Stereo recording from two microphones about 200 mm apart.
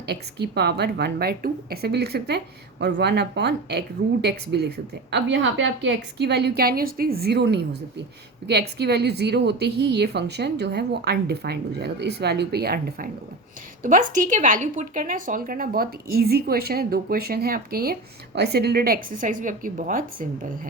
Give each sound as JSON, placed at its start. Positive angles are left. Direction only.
{"t": 0.0, "sound": "a woman's voice", "side_deg": -55}